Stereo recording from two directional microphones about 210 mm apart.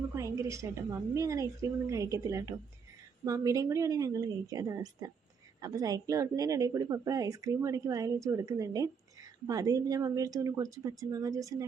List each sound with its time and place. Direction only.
0.2 s a woman's voice: 15° right (ahead or behind)